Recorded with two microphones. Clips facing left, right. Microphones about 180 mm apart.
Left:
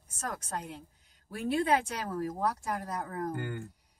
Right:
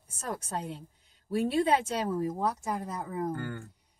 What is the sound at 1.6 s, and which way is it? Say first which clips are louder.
Speech: right 2 dB; 25° right (ahead or behind).